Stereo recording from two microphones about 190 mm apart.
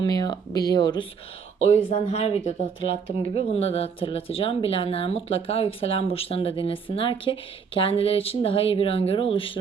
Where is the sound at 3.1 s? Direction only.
45° right (ahead or behind).